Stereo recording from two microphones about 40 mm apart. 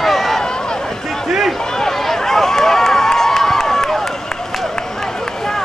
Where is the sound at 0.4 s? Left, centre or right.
Centre.